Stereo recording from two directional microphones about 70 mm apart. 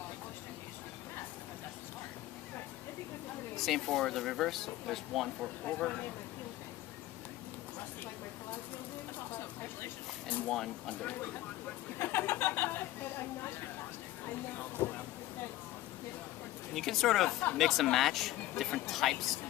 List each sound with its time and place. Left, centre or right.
3.6 s speech: centre
5.6 s speech: centre
9.3 s a sound: left
10.2 s speech: left
11.9 s chatter: left
14.3 s a sound: left
16.7 s speech: centre
17.2 s speech: left
17.6 s speech: centre